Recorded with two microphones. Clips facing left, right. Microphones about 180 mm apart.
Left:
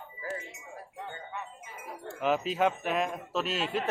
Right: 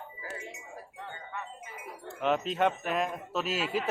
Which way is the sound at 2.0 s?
Centre (ahead or behind).